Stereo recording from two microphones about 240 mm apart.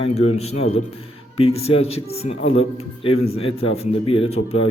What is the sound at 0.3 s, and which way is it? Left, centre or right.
A man's voice, left.